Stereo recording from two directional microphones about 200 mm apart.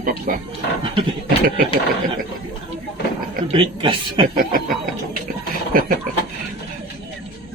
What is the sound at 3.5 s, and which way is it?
Speech, 25° right (ahead or behind).